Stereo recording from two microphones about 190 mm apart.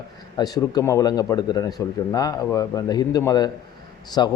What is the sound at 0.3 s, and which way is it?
Speech, 20° left (ahead or behind).